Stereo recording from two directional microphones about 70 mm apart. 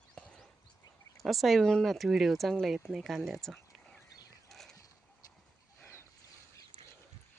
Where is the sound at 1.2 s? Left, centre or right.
Centre.